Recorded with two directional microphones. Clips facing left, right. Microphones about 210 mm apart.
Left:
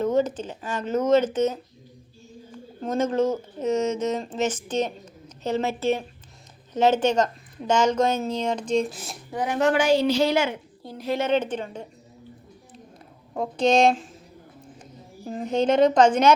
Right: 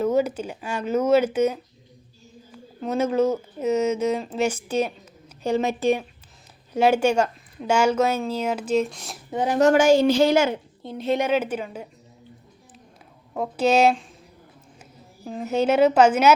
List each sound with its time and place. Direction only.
0.0 s speech: 10° right (ahead or behind)
2.8 s speech: 10° right (ahead or behind)
9.3 s a woman's voice: 30° right (ahead or behind)
9.6 s a woman's voice: 45° right (ahead or behind)
10.8 s a woman's voice: 25° right (ahead or behind)
11.3 s speech: 10° right (ahead or behind)
13.3 s speech: 5° right (ahead or behind)
15.2 s speech: centre (ahead or behind)